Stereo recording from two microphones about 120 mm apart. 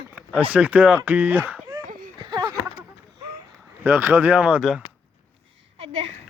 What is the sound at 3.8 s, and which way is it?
Speech, 15° right (ahead or behind).